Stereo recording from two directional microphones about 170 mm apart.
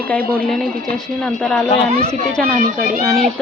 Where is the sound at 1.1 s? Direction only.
5° left (ahead or behind).